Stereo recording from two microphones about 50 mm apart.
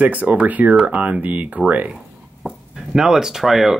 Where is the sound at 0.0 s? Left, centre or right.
Right.